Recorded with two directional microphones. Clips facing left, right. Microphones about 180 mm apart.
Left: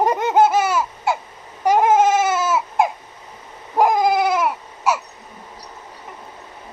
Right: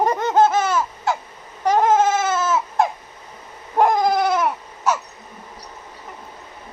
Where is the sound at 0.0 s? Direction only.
10° left (ahead or behind).